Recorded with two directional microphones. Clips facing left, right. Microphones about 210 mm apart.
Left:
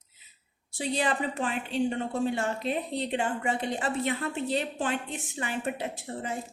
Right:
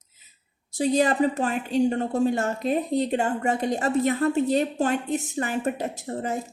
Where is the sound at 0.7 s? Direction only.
40° right (ahead or behind).